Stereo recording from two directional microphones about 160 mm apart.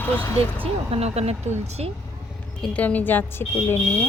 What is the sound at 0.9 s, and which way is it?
Speech, 40° right (ahead or behind).